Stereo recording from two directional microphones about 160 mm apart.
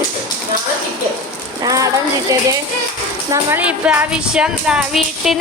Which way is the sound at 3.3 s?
10° right (ahead or behind).